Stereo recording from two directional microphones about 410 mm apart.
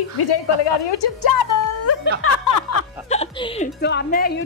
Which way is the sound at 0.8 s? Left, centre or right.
Left.